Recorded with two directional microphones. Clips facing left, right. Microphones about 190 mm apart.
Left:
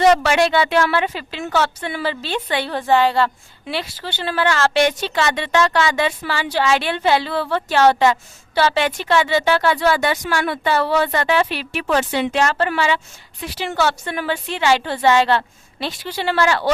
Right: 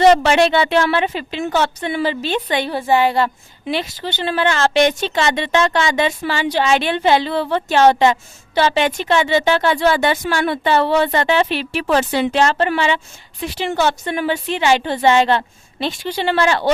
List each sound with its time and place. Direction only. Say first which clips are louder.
0.0 s a woman's voice: right 3 dB; 25° right (ahead or behind)